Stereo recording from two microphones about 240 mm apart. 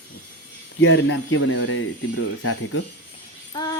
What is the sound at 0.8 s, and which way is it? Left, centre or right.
Speech, left.